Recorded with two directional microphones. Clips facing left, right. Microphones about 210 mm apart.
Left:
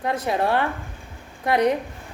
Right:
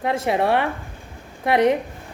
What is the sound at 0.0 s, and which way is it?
A woman's voice, 25° right (ahead or behind).